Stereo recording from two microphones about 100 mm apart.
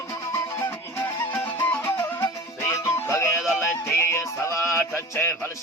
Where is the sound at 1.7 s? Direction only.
20° left (ahead or behind).